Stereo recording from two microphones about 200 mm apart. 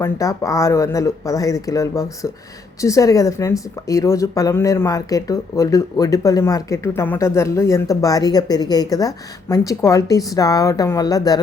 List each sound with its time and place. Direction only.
0.0 s speech: 15° left (ahead or behind)